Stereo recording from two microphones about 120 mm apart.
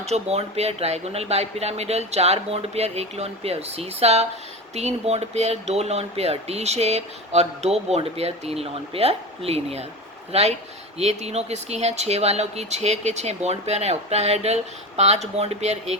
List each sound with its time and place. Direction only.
0.0 s speech: 60° right (ahead or behind)